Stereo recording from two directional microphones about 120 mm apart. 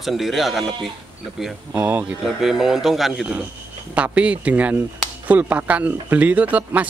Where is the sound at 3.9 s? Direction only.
10° right (ahead or behind).